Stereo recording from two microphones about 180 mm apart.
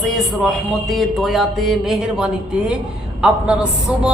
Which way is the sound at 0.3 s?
Centre (ahead or behind).